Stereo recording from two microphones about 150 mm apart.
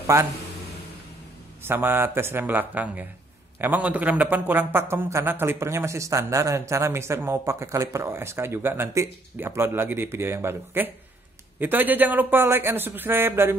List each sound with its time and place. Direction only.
0.0 s a man's voice: 20° right (ahead or behind)
1.6 s speech: 15° right (ahead or behind)